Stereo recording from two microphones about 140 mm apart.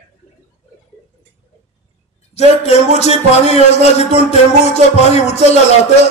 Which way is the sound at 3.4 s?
50° left (ahead or behind).